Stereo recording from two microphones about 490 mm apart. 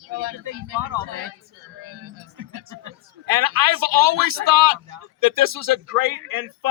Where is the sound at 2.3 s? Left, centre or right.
Right.